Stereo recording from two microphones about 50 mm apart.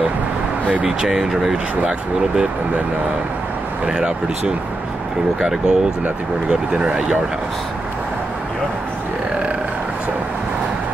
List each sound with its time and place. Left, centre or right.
0.8 s speech: centre
3.8 s speech: centre
5.4 s speech: centre